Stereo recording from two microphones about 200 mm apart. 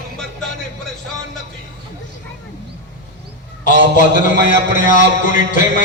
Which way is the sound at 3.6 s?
40° left (ahead or behind).